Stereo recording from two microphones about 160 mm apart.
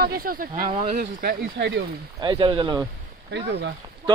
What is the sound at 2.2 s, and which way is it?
Speech, 30° right (ahead or behind).